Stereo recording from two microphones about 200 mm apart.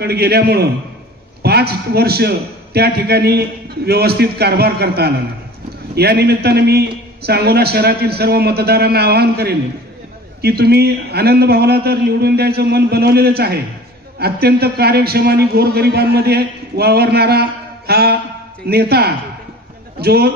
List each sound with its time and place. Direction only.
0.0 s a man's voice: 50° right (ahead or behind)